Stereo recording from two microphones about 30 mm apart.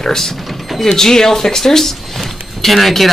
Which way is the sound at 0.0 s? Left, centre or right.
Centre.